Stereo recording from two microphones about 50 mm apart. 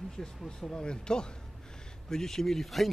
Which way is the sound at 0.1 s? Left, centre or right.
Centre.